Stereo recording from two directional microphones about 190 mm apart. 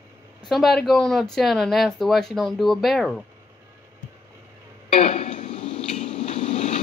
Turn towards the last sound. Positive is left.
turn(degrees=35)  # may be behind; listen again after turning